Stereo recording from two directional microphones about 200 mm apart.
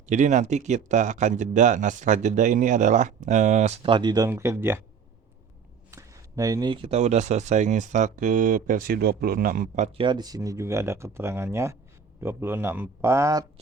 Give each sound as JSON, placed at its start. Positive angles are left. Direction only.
{"t": 0.0, "sound": "speech", "side_deg": -35}
{"t": 5.9, "sound": "speech", "side_deg": -15}
{"t": 10.0, "sound": "speech", "side_deg": -20}